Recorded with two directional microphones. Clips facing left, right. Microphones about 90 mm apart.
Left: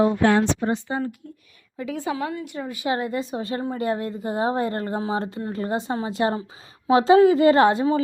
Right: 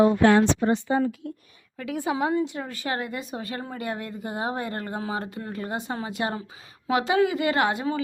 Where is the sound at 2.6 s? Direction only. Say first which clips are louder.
Left 5 dB; 15° left (ahead or behind).